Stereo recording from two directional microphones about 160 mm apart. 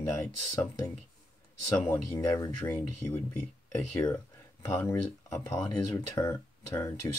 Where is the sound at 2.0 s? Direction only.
15° left (ahead or behind).